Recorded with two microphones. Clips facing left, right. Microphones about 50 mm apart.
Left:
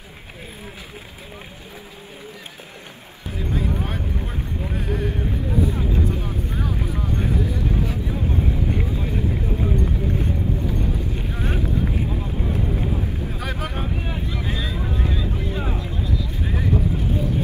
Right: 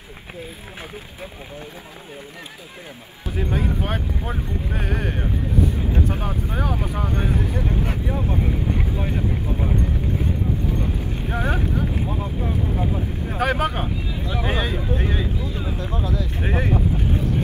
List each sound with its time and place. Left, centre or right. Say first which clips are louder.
3.3 s speech: right 1 dB; right
11.2 s speech: right 6 dB; right
13.3 s speech: right 7 dB; right
15.4 s speech: left 2 dB; left
15.8 s speech: right 2 dB; right